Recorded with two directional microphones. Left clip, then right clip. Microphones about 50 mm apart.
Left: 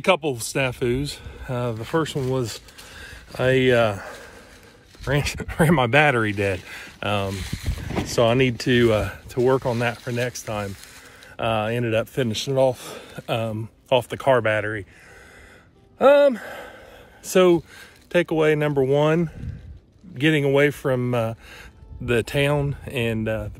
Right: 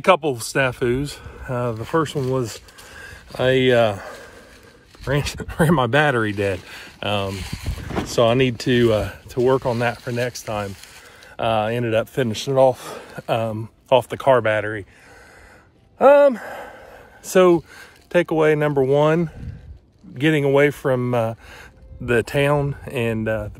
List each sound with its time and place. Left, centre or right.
0.0 s speech: left
16.0 s speech: left